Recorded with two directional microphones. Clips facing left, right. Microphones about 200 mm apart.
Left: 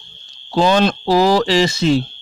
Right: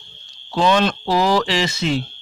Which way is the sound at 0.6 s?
35° left (ahead or behind).